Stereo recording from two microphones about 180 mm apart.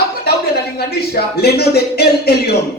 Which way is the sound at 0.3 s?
60° left (ahead or behind).